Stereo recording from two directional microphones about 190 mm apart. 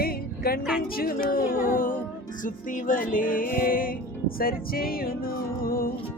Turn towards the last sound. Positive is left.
turn(degrees=50)  # may be behind; listen again after turning